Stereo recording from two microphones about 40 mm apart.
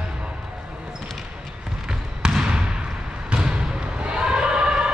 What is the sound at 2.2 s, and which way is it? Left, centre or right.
Trickle, centre.